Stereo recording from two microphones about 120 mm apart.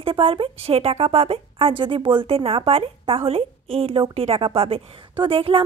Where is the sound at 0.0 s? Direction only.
50° right (ahead or behind).